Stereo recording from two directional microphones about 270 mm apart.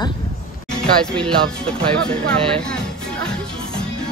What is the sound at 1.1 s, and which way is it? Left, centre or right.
Speech, centre.